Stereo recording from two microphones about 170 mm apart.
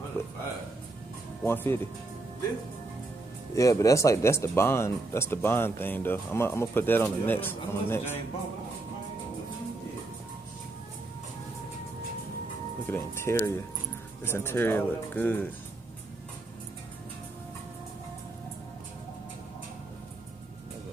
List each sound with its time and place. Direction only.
1.4 s speech: 15° left (ahead or behind)
3.5 s speech: 20° left (ahead or behind)
12.8 s speech: 15° left (ahead or behind)